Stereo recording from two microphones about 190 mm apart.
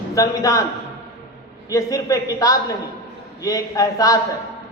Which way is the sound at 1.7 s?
15° left (ahead or behind).